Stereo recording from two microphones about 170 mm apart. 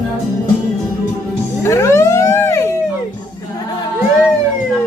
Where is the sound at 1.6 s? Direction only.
15° left (ahead or behind).